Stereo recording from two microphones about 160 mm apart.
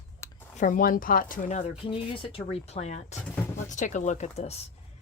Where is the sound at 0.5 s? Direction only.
55° left (ahead or behind).